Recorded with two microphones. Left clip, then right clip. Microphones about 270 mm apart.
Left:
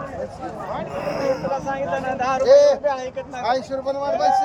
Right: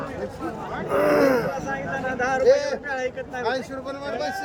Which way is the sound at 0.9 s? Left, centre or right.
Centre.